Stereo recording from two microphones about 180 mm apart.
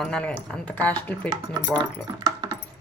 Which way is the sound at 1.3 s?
20° right (ahead or behind).